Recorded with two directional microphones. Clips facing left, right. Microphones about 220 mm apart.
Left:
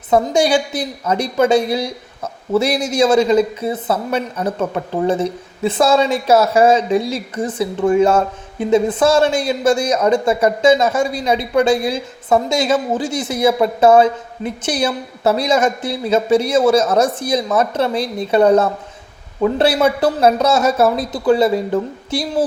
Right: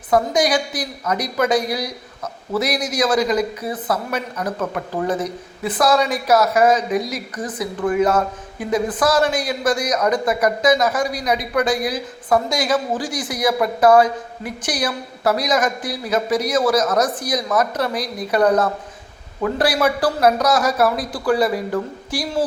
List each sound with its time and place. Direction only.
0.1 s speech: 25° left (ahead or behind)